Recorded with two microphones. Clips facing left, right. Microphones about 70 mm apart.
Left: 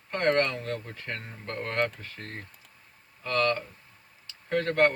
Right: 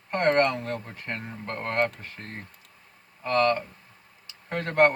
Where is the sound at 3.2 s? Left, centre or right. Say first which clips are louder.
Right 4 dB; right.